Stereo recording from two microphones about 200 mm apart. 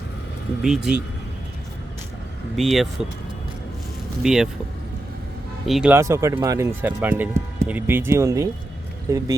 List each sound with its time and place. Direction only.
0.6 s speech: 5° right (ahead or behind)
2.6 s speech: centre (ahead or behind)
4.2 s speech: centre (ahead or behind)
5.6 s speech: 5° right (ahead or behind)
6.0 s speech: 15° right (ahead or behind)